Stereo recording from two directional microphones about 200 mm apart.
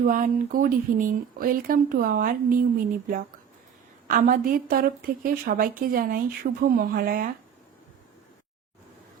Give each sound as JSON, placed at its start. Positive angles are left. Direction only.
{"t": 0.0, "sound": "a woman's voice", "side_deg": -45}
{"t": 4.1, "sound": "a woman's voice", "side_deg": -45}